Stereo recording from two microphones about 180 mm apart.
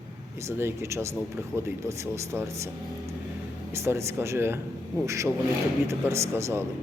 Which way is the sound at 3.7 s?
15° right (ahead or behind).